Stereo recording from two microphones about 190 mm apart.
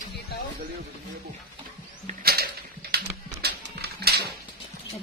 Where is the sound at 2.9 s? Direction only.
55° right (ahead or behind).